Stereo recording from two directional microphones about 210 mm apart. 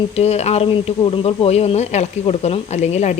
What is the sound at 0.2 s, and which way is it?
Speech, 30° left (ahead or behind).